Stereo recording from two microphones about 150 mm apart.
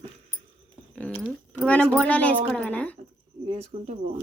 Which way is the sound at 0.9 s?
10° left (ahead or behind).